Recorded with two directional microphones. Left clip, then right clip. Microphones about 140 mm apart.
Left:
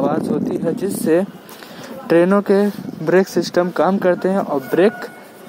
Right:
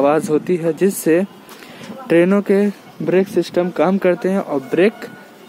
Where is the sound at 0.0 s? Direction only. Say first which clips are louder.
Right 4 dB; 20° right (ahead or behind).